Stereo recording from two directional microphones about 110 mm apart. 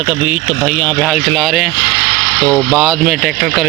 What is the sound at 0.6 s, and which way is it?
Speech, 30° left (ahead or behind).